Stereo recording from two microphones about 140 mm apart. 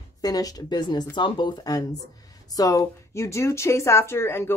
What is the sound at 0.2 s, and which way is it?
Speech, 25° left (ahead or behind).